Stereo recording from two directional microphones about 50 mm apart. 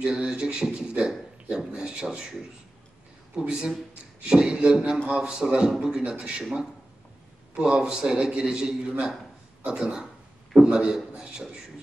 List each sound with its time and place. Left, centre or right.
0.0 s a man's voice: centre
3.3 s a man's voice: centre